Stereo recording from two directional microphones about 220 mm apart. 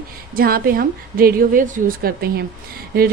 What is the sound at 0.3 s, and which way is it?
A woman's voice, 40° right (ahead or behind).